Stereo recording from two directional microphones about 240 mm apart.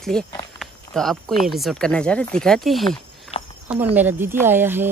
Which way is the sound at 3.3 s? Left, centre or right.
Left.